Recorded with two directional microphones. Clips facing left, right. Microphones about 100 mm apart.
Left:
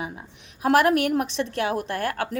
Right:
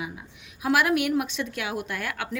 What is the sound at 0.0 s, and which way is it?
A woman's voice, 40° left (ahead or behind).